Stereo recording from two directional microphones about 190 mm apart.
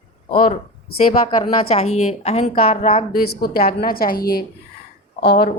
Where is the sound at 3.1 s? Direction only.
50° left (ahead or behind).